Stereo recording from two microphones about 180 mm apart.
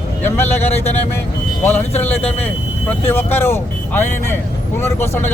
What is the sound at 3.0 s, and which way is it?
Speech, 10° left (ahead or behind).